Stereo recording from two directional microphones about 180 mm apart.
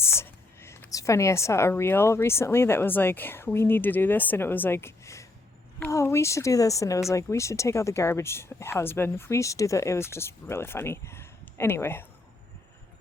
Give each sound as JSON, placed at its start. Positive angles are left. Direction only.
{"t": 0.0, "sound": "speech", "side_deg": 15}